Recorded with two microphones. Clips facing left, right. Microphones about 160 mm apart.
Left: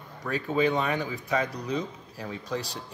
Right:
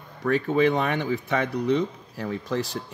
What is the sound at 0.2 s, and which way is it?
Speech, 65° right (ahead or behind).